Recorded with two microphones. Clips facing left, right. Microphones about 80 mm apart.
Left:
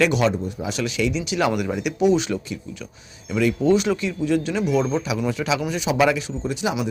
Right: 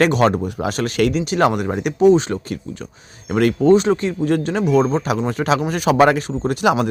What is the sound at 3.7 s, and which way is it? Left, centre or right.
Speech, right.